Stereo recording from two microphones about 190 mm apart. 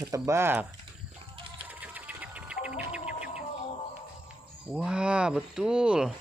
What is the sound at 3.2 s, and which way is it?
Music, 40° left (ahead or behind).